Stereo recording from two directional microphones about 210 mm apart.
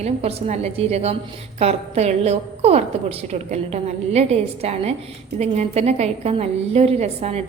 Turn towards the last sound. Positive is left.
turn(degrees=-30)  # may be behind; listen again after turning